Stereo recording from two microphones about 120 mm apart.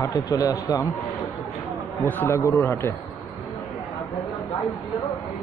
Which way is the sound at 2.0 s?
15° left (ahead or behind).